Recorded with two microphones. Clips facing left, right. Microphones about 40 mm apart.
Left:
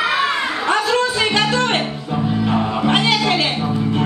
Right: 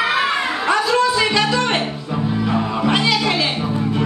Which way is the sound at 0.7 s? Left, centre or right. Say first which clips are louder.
Right 1 dB; left.